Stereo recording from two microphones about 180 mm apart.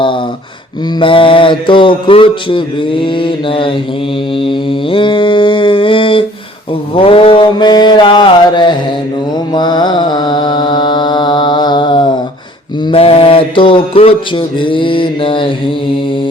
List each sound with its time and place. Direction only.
0.9 s mantra: 30° left (ahead or behind)